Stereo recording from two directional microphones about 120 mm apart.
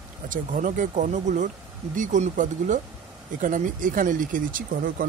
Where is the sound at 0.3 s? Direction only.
90° right.